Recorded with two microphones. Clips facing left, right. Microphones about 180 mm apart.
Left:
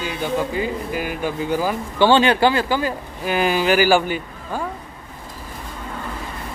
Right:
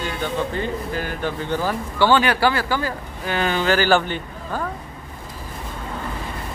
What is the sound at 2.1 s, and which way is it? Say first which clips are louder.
Speech: left 3 dB; 25° left (ahead or behind).